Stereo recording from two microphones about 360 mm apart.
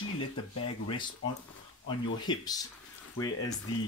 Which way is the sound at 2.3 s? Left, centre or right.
Centre.